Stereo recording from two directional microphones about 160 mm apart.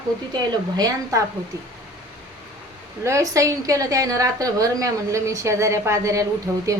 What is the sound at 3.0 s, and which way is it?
A woman's voice, 20° right (ahead or behind).